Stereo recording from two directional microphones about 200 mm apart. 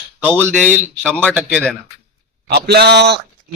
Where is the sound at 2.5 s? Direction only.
55° right (ahead or behind).